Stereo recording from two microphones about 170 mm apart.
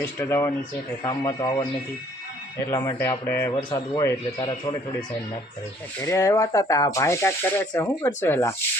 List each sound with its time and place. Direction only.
0.0 s speech: 15° left (ahead or behind)
1.0 s speech: 25° left (ahead or behind)
2.6 s speech: 20° left (ahead or behind)
3.5 s speech: 25° left (ahead or behind)